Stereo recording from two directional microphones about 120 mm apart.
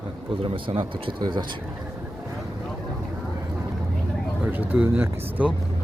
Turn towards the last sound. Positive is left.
turn(degrees=-15)  # may be behind; listen again after turning